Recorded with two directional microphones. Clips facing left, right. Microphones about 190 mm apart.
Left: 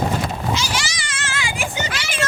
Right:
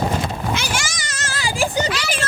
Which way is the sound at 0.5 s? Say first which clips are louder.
Even; 55° right (ahead or behind).